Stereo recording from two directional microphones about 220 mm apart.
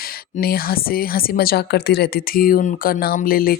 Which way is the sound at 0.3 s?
45° left (ahead or behind).